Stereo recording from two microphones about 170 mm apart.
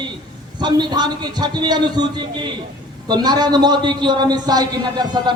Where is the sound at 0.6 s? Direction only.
25° right (ahead or behind).